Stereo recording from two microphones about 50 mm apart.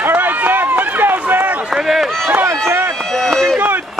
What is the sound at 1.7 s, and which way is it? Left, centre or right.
Run, centre.